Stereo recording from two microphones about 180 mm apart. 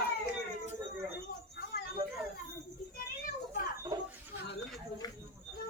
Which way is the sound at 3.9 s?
20° right (ahead or behind).